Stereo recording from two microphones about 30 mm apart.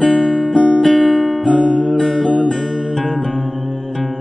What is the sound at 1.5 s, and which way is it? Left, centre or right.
Music, left.